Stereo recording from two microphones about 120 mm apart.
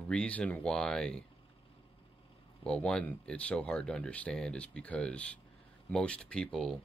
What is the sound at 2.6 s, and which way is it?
Speech, 5° left (ahead or behind).